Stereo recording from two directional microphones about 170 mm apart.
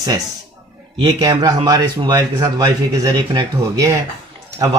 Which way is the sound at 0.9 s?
25° right (ahead or behind).